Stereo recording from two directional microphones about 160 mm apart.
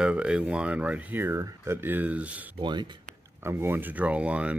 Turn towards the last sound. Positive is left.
turn(degrees=-10)  # may be behind; listen again after turning